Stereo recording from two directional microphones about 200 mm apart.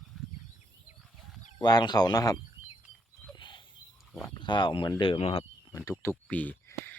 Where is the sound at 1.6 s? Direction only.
20° left (ahead or behind).